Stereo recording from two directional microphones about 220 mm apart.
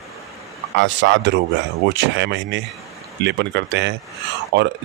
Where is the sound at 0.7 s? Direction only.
55° right (ahead or behind).